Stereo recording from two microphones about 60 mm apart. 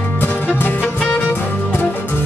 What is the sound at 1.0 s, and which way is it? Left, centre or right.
Music, left.